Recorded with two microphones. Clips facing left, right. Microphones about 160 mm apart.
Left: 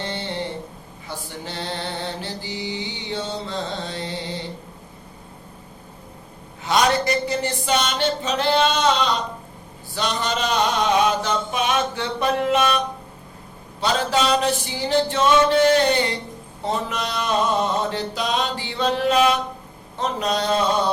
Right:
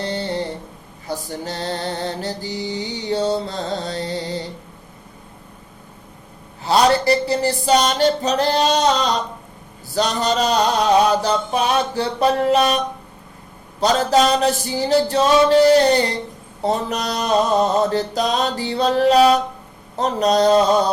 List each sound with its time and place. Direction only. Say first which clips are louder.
0.0 s a sound: right 5 dB; 40° right (ahead or behind)
1.0 s mantra: right 6 dB; 40° right (ahead or behind)
6.7 s mantra: right 4 dB; 35° right (ahead or behind)
9.9 s mantra: right 5 dB; 40° right (ahead or behind)